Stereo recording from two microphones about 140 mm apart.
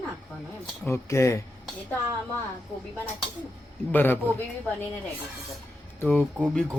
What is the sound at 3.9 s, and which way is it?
Speech, 15° left (ahead or behind).